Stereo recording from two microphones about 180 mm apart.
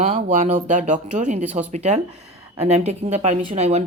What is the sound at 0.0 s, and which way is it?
Speech, 35° right (ahead or behind).